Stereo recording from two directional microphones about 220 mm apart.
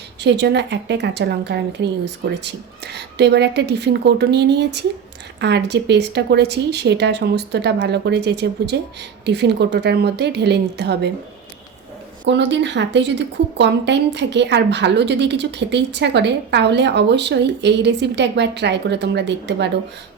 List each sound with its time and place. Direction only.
0.2 s a woman's voice: 50° right (ahead or behind)
12.2 s a woman's voice: 55° right (ahead or behind)